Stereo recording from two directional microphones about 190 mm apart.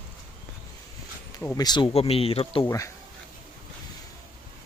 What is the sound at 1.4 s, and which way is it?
Speech, 20° left (ahead or behind).